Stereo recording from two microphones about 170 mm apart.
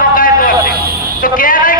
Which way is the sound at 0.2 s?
55° left (ahead or behind).